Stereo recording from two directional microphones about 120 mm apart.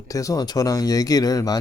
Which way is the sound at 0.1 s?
30° left (ahead or behind).